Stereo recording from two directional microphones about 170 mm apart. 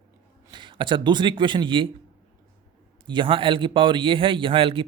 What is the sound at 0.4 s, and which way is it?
Speech, 25° right (ahead or behind).